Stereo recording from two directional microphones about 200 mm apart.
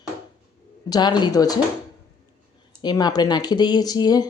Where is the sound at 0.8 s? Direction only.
20° left (ahead or behind).